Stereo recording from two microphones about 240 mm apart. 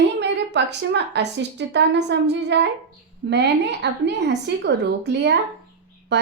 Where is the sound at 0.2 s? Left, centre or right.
Right.